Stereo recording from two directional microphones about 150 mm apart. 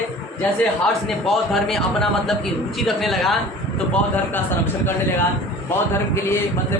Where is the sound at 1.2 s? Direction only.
Centre (ahead or behind).